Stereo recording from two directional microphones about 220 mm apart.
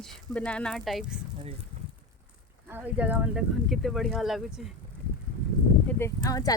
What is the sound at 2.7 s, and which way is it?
Speech, 10° right (ahead or behind).